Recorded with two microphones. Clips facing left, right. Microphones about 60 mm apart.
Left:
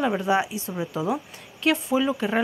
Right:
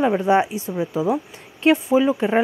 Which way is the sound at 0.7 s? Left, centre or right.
Centre.